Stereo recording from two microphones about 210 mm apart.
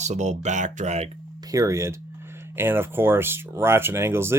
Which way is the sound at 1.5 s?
15° right (ahead or behind).